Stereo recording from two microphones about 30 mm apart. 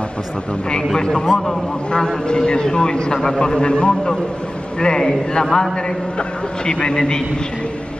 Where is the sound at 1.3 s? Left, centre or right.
Centre.